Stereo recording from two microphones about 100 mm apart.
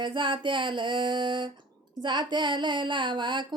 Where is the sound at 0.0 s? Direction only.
55° right (ahead or behind).